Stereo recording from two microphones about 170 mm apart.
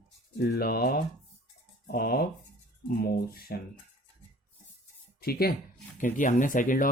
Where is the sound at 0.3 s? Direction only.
65° left (ahead or behind).